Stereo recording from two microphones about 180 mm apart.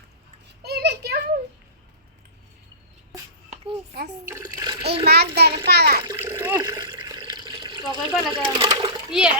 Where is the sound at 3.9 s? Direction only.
65° right (ahead or behind).